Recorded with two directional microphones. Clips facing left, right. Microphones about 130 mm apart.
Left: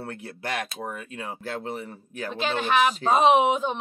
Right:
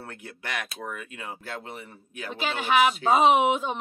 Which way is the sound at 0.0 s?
35° left (ahead or behind).